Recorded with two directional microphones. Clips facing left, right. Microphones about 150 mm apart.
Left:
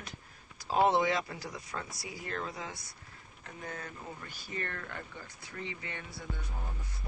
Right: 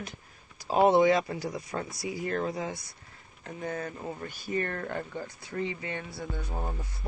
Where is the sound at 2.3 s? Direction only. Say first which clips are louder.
Right 6 dB; 40° right (ahead or behind).